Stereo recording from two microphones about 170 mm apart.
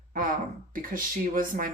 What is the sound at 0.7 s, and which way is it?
Speech, 55° right (ahead or behind).